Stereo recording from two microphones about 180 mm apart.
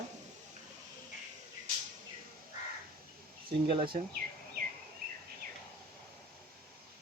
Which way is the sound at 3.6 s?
30° right (ahead or behind).